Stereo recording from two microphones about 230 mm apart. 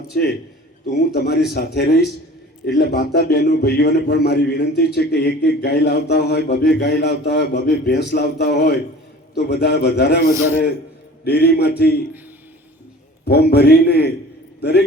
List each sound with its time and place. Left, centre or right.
0.1 s a man's voice: left
11.3 s a man's voice: left
13.2 s a man's voice: left